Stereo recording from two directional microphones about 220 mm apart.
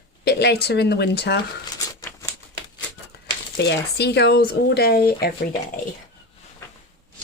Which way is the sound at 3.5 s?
50° left (ahead or behind).